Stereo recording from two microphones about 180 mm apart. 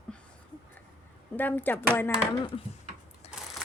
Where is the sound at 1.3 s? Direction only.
10° left (ahead or behind).